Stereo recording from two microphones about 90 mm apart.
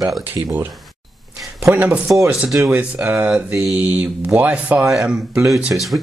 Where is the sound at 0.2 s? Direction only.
20° right (ahead or behind).